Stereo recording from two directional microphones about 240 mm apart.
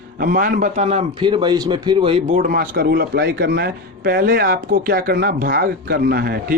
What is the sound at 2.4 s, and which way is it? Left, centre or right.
Speech, right.